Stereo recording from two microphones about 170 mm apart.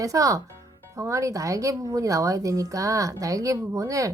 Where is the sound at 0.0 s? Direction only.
20° right (ahead or behind).